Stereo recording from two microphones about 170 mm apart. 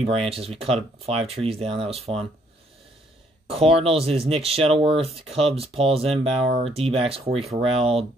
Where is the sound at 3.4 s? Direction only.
35° right (ahead or behind).